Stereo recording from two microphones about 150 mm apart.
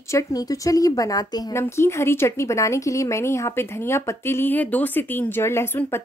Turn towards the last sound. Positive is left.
turn(degrees=15)  # may be behind; listen again after turning